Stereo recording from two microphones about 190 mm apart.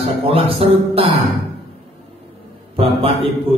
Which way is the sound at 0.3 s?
30° right (ahead or behind).